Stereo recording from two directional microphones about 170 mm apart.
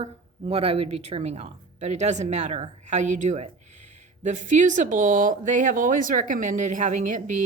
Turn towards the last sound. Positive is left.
turn(degrees=-50)  # may be behind; listen again after turning